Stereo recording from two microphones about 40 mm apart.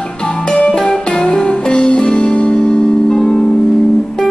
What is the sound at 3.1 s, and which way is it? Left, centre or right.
Music, centre.